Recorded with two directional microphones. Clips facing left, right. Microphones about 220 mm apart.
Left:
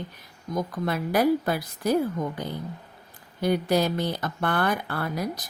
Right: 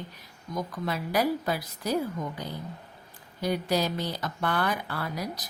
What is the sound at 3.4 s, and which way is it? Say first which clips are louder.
Speech: left 4 dB; 55° left (ahead or behind).